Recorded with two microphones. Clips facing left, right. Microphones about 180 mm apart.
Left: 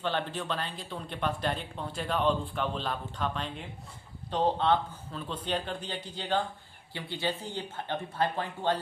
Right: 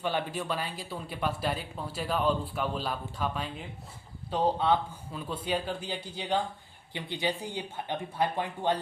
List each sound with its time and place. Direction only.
0.0 s speech: 10° right (ahead or behind)